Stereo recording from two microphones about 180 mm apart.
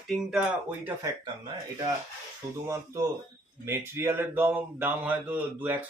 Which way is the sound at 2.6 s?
20° right (ahead or behind).